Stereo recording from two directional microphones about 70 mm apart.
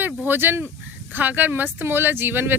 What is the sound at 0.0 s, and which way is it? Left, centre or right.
Speech, right.